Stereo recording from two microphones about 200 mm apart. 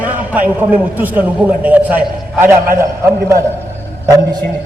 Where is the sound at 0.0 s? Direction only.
5° right (ahead or behind).